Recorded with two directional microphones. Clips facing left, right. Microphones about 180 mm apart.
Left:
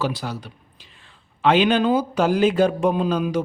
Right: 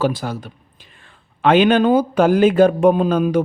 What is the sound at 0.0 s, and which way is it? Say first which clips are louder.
Speech: right 5 dB; 50° right (ahead or behind).